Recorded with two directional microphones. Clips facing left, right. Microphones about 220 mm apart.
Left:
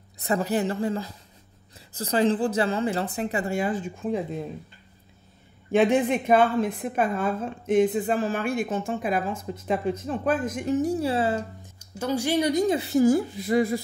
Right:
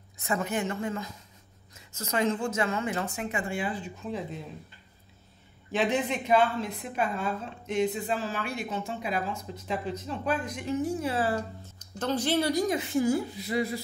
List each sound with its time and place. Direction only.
0.2 s a woman's voice: 35° left (ahead or behind)
5.7 s a woman's voice: 50° left (ahead or behind); by 11.7 s 25° left (ahead or behind)
11.8 s speech: 10° left (ahead or behind)
12.7 s a woman's voice: 40° left (ahead or behind)